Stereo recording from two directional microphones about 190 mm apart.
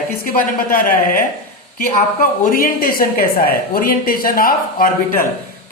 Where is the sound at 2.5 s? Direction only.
50° left (ahead or behind).